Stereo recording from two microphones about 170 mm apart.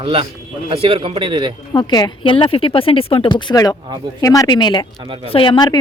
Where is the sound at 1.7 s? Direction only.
25° left (ahead or behind).